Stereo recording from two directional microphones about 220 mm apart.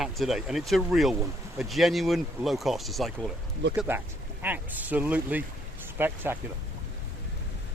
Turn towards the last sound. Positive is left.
turn(degrees=-10)  # may be behind; listen again after turning